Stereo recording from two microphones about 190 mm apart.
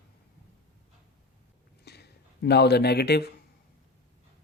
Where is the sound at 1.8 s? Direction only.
60° left (ahead or behind).